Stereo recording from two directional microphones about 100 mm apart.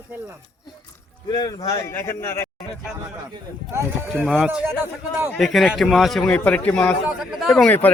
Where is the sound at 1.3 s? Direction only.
45° left (ahead or behind).